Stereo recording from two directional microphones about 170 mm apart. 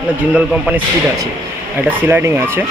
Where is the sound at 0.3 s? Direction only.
5° right (ahead or behind).